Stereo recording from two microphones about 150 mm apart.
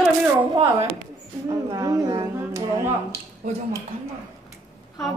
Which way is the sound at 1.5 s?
25° right (ahead or behind).